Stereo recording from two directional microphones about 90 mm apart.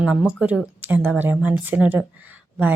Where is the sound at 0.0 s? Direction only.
10° right (ahead or behind).